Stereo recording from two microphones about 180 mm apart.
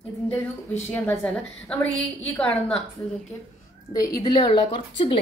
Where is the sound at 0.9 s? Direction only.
5° left (ahead or behind).